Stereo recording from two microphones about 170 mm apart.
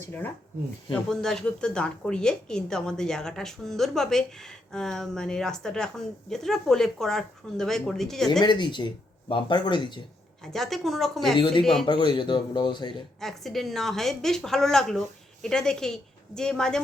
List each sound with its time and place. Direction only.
1.1 s a woman's voice: 5° left (ahead or behind)
8.3 s speech: 25° left (ahead or behind)
10.4 s a woman's voice: centre (ahead or behind)
11.3 s speech: 30° left (ahead or behind)
11.6 s a woman's voice: centre (ahead or behind)
11.9 s speech: 25° left (ahead or behind)
13.1 s a woman's voice: centre (ahead or behind)